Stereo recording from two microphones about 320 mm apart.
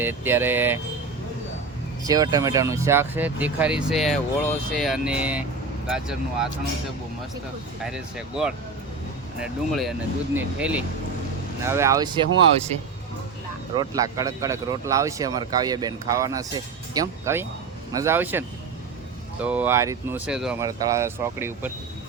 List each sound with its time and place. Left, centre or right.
0.0 s speech: centre
2.0 s speech: centre
7.9 s speech: centre
13.7 s speech: centre